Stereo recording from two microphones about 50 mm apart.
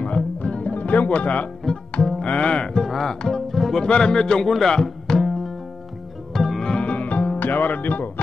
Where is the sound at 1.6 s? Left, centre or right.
Centre.